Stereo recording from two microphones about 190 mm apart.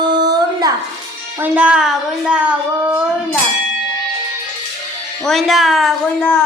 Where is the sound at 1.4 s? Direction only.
5° right (ahead or behind).